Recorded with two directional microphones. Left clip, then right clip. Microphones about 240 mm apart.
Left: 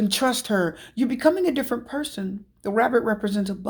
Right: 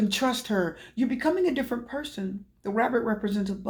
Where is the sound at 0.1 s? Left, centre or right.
Left.